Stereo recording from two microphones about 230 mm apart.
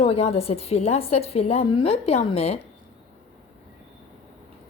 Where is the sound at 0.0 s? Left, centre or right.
Left.